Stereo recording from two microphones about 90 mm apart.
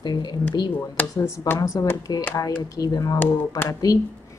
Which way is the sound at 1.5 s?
40° left (ahead or behind).